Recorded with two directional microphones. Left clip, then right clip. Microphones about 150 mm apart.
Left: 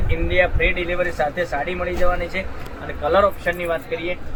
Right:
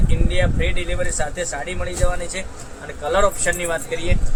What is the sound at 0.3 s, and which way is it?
Speech, 10° right (ahead or behind).